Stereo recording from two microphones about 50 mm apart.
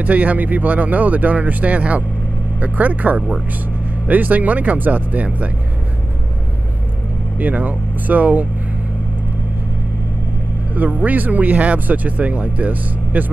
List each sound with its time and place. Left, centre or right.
0.0 s speech: right
7.3 s speech: right
10.7 s speech: right